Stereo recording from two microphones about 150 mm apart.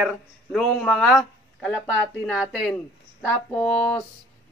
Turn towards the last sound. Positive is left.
turn(degrees=5)  # may be behind; listen again after turning